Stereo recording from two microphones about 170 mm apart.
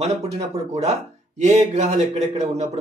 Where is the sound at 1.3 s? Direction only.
40° right (ahead or behind).